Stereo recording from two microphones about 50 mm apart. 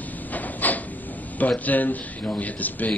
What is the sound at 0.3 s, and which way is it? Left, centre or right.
Vehicle, left.